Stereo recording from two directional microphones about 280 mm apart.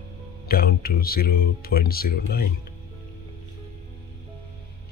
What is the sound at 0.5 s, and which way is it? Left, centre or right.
Speech, left.